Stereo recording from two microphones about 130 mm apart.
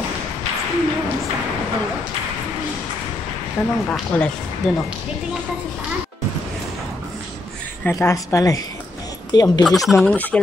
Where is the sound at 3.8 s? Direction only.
10° left (ahead or behind).